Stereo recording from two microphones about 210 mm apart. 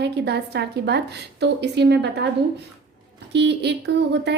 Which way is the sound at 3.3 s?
55° right (ahead or behind).